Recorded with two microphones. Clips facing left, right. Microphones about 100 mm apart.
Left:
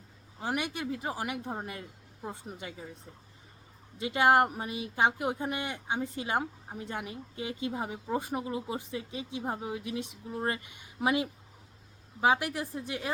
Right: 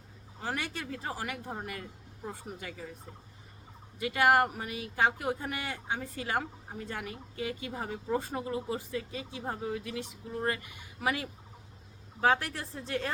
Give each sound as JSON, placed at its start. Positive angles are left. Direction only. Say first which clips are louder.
{"t": 0.4, "sound": "speech", "louder": "left 3 dB", "side_deg": 15}